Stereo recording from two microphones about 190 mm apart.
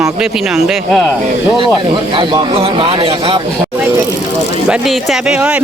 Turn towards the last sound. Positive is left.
turn(degrees=-5)  # may be behind; listen again after turning